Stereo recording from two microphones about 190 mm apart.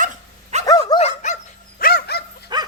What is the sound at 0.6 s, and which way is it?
Dog, 20° left (ahead or behind).